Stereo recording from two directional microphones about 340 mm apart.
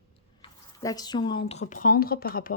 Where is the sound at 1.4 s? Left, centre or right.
Left.